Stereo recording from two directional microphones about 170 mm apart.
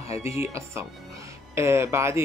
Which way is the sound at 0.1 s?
15° right (ahead or behind).